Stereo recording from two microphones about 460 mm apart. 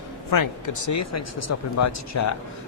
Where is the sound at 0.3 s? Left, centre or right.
Left.